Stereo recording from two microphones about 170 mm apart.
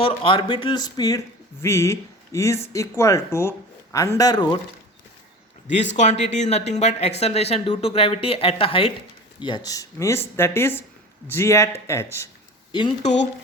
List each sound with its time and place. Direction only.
0.0 s speech: 30° left (ahead or behind)
5.6 s speech: 45° left (ahead or behind); by 12.3 s 15° left (ahead or behind)